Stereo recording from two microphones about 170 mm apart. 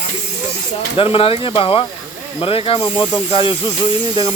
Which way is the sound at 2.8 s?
20° left (ahead or behind).